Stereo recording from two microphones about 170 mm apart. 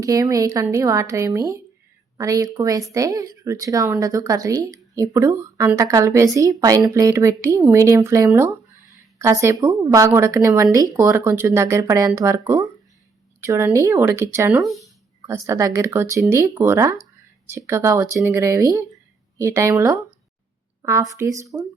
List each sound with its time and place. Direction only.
0.0 s a woman's voice: 20° right (ahead or behind)
14.6 s speech: centre (ahead or behind)
15.3 s a woman's voice: 15° right (ahead or behind)